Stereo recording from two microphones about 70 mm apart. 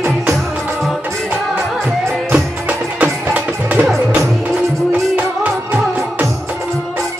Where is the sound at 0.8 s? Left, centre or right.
Centre.